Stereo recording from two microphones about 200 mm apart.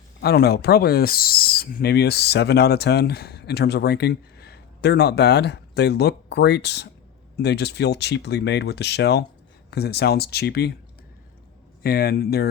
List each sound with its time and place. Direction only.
0.2 s owl: 55° left (ahead or behind)
9.6 s speech: 55° left (ahead or behind)
11.8 s speech: 50° left (ahead or behind)